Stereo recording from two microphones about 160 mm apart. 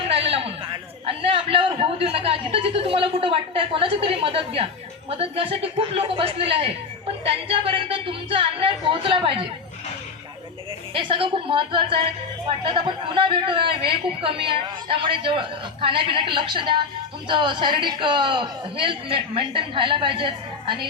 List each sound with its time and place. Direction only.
0.1 s a man's voice: 40° right (ahead or behind)
10.9 s a man's voice: 35° right (ahead or behind)